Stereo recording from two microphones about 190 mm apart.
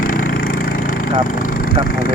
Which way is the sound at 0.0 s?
45° left (ahead or behind).